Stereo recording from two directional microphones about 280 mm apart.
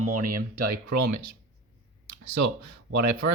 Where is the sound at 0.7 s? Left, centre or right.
Right.